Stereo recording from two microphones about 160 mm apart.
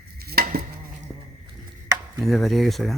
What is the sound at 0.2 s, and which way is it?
Insect, 75° right (ahead or behind).